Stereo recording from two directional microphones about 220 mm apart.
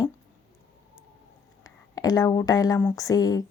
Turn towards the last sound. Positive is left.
turn(degrees=15)  # may be behind; listen again after turning